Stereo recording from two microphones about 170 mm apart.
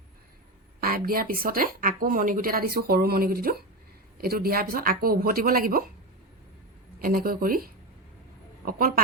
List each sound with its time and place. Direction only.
0.8 s a woman's voice: 60° right (ahead or behind)
7.0 s a woman's voice: 60° right (ahead or behind)